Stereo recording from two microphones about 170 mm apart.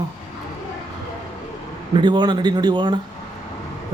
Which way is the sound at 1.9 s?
25° right (ahead or behind).